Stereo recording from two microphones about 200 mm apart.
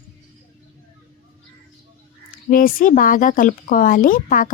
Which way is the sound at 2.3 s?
45° left (ahead or behind).